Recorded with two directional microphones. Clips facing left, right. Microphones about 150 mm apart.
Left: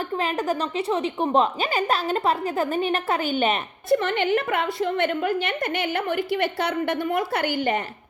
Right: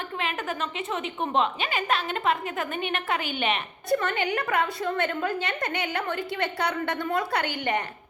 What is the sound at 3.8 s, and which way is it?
A woman's voice, 25° left (ahead or behind).